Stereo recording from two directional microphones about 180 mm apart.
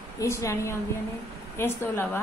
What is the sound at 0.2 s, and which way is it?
A woman's voice, 15° left (ahead or behind).